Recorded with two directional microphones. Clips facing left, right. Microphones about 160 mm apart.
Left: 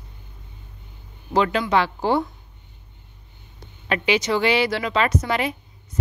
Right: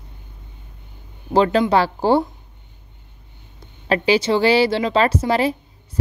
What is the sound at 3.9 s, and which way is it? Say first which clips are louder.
Speech: right 4 dB; 30° right (ahead or behind).